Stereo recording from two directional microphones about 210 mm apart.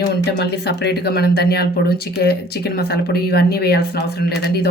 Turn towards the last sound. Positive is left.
turn(degrees=50)  # may be behind; listen again after turning